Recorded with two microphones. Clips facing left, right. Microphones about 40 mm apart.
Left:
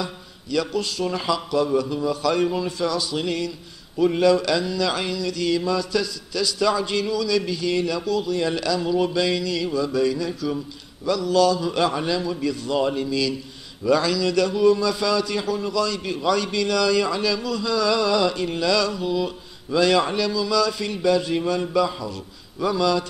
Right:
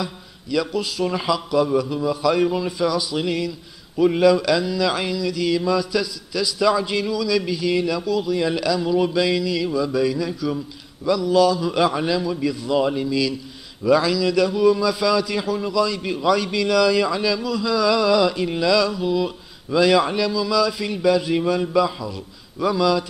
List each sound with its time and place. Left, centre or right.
0.0 s a man's voice: centre
0.9 s a sound: centre
22.1 s a man's voice: centre